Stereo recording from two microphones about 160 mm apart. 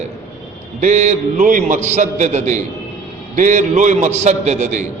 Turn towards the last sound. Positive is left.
turn(degrees=-50)  # may be behind; listen again after turning